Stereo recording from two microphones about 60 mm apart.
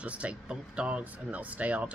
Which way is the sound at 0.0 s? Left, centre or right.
Centre.